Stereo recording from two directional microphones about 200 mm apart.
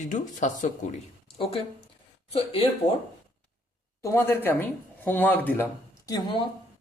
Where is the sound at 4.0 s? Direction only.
15° left (ahead or behind).